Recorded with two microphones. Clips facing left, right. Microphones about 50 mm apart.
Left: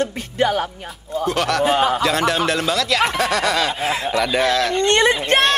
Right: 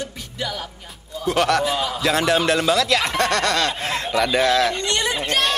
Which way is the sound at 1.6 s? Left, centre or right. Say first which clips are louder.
Left 6 dB; left.